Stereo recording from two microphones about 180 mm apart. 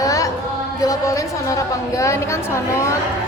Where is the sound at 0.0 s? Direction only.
20° left (ahead or behind).